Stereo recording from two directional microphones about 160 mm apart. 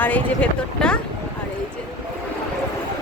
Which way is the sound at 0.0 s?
10° left (ahead or behind).